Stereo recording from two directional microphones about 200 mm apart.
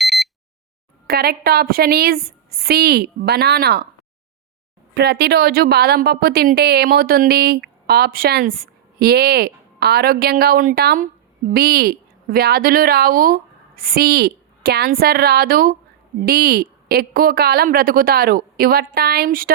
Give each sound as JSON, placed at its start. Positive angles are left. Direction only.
{"t": 0.0, "sound": "a sound", "side_deg": 0}
{"t": 1.0, "sound": "speech", "side_deg": -50}
{"t": 4.9, "sound": "a woman's voice", "side_deg": -50}